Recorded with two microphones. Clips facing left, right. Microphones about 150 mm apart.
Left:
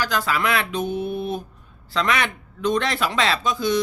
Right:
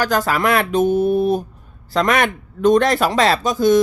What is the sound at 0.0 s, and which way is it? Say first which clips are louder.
A man's voice: right 5 dB; 45° right (ahead or behind).